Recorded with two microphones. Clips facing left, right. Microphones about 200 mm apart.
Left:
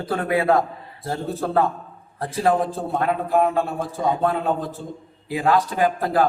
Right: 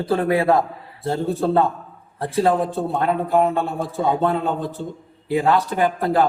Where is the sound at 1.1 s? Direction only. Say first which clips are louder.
Right 5 dB; 30° right (ahead or behind).